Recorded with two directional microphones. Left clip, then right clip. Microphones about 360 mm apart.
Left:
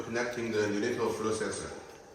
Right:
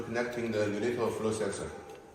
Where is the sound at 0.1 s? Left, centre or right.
Centre.